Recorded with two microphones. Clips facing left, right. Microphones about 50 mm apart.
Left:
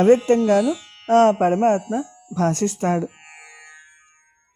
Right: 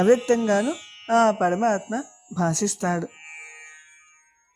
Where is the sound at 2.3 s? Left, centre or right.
Left.